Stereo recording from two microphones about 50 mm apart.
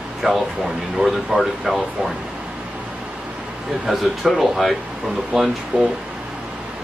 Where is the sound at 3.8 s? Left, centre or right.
Centre.